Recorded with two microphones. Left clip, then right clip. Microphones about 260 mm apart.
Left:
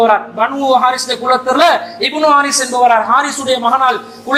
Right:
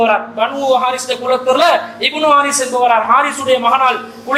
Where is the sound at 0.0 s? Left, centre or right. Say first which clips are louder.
Left 2 dB; left.